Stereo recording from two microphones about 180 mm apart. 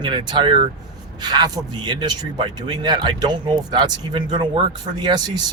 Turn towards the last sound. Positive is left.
turn(degrees=-25)  # may be behind; listen again after turning